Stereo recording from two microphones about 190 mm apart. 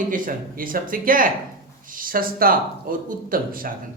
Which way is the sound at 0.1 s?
45° right (ahead or behind).